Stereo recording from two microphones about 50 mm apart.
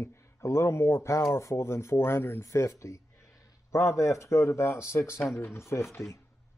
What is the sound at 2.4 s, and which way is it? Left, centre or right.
Speech, left.